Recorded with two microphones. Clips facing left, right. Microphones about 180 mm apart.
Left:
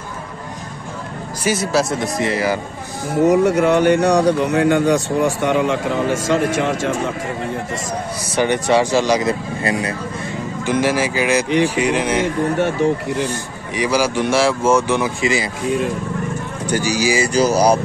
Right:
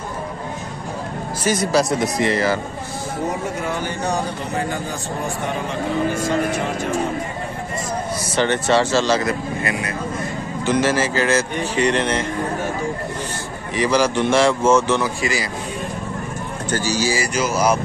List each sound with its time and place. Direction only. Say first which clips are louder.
1.4 s speech: even; 5° left (ahead or behind)
3.3 s speech: left 13 dB; 75° left (ahead or behind)
8.4 s a man's voice: left 2 dB; 15° left (ahead or behind)
9.6 s speech: left 4 dB; 30° left (ahead or behind)
10.6 s a man's voice: left 1 dB; 15° left (ahead or behind)
12.8 s speech: left 9 dB; 70° left (ahead or behind)
13.7 s a man's voice: even; 10° left (ahead or behind)
16.6 s a man's voice: left 3 dB; 15° left (ahead or behind)
17.3 s speech: left 7 dB; 35° left (ahead or behind)